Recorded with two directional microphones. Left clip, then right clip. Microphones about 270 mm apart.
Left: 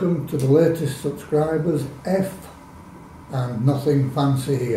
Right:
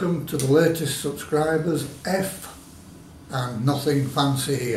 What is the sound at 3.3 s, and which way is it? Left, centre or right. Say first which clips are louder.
Speech: left 1 dB; centre.